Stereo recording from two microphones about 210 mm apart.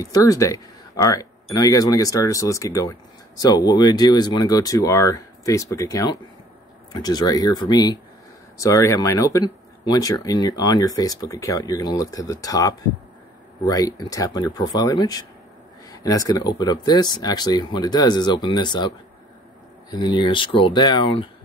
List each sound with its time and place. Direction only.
0.0 s speech: 15° left (ahead or behind)
19.9 s speech: 20° left (ahead or behind)